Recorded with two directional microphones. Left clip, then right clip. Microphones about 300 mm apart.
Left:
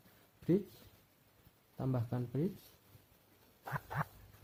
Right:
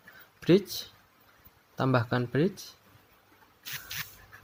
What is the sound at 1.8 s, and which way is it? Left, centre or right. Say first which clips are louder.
Speech: right 14 dB; right.